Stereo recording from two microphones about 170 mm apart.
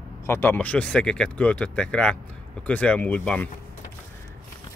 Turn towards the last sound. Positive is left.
turn(degrees=5)  # may be behind; listen again after turning